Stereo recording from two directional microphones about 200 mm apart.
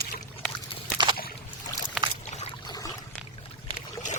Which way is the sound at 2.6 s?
20° left (ahead or behind).